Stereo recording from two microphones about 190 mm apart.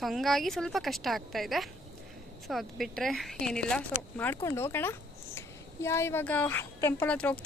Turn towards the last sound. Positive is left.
turn(degrees=5)  # may be behind; listen again after turning